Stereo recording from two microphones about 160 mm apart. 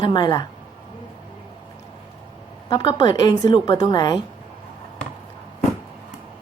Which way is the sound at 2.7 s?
30° left (ahead or behind).